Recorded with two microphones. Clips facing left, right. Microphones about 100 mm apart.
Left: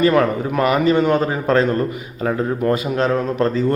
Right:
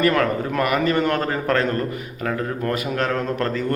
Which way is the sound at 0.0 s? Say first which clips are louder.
Left 4 dB; 15° left (ahead or behind).